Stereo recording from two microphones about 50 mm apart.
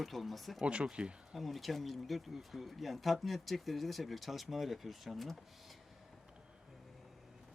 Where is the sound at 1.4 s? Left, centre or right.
Centre.